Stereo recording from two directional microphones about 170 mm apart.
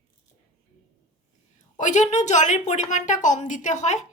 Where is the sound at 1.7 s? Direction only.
45° left (ahead or behind).